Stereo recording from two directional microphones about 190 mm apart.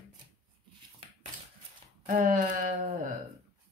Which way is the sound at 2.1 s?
45° right (ahead or behind).